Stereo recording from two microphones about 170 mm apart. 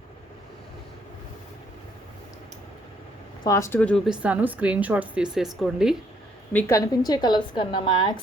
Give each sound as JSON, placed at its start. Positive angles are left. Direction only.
{"t": 3.4, "sound": "speech", "side_deg": 20}
{"t": 6.5, "sound": "a woman's voice", "side_deg": 15}